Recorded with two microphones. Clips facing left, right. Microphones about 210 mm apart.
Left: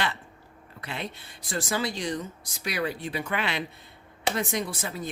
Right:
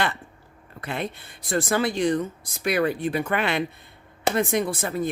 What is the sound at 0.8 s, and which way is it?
Speech, 50° right (ahead or behind).